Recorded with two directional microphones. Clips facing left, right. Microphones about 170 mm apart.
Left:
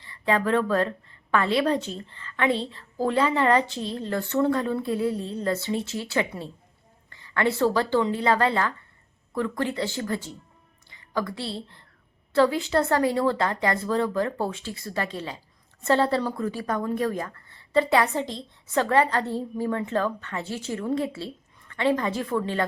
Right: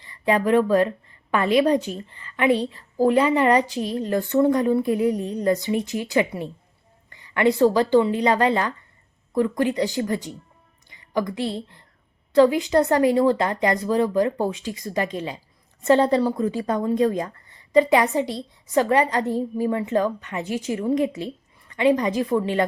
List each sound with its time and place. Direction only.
0.0 s a woman's voice: 15° right (ahead or behind)